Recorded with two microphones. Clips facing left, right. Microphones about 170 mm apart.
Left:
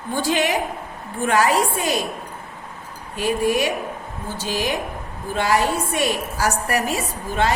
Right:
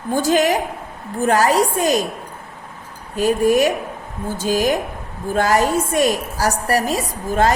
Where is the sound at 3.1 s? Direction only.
45° right (ahead or behind).